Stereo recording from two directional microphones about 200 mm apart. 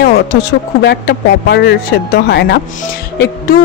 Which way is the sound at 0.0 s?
55° left (ahead or behind).